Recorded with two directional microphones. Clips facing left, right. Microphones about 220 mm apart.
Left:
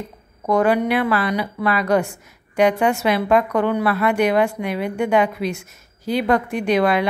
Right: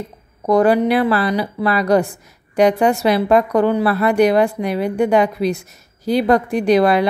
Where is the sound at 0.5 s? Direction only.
35° right (ahead or behind).